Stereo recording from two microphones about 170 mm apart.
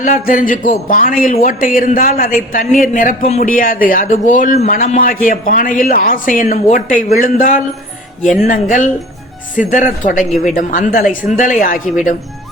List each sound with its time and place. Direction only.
0.0 s a man's voice: 50° left (ahead or behind)
4.9 s speech: 55° left (ahead or behind)
8.2 s music: centre (ahead or behind)
8.4 s speech: 50° left (ahead or behind)